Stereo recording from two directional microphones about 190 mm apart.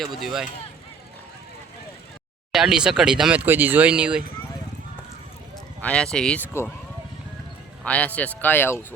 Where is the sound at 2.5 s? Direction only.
5° right (ahead or behind).